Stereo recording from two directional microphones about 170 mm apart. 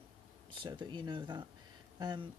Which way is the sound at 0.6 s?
25° right (ahead or behind).